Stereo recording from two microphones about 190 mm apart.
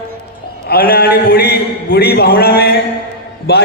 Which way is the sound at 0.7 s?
50° left (ahead or behind).